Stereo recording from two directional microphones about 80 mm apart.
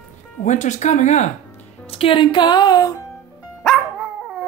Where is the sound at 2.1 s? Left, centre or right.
Left.